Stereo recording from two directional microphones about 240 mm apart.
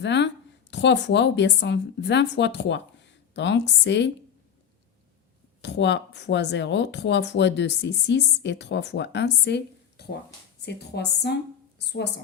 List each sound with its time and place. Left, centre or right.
0.0 s a woman's voice: left
5.6 s speech: left
10.0 s a sound: left
10.7 s speech: left